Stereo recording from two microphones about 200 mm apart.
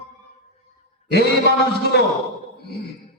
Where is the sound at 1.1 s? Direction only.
55° left (ahead or behind).